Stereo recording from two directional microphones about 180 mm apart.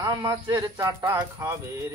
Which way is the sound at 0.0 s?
20° right (ahead or behind).